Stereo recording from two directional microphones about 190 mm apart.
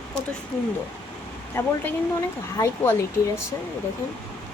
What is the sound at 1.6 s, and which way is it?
Speech, 15° left (ahead or behind).